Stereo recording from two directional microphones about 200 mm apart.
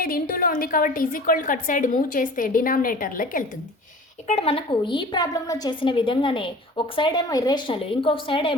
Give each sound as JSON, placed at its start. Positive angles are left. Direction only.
{"t": 0.0, "sound": "a woman's voice", "side_deg": 45}
{"t": 4.3, "sound": "a woman's voice", "side_deg": 30}